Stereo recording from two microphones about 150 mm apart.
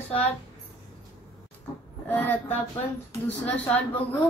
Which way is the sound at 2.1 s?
10° left (ahead or behind).